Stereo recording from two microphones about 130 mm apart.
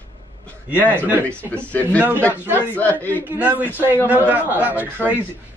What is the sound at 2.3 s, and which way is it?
A woman's voice, 15° right (ahead or behind).